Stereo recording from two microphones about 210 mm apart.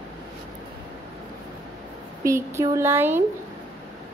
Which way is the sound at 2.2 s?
15° right (ahead or behind).